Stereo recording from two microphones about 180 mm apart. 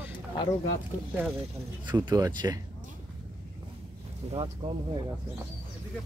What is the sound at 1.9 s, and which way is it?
Speech, 20° right (ahead or behind).